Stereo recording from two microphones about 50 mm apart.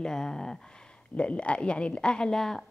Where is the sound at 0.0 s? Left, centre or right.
Centre.